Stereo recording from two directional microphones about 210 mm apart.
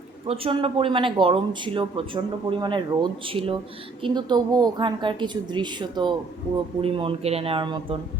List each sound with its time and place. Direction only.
0.3 s speech: 25° right (ahead or behind)